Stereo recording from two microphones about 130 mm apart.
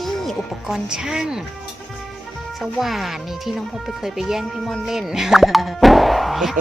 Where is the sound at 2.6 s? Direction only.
Centre (ahead or behind).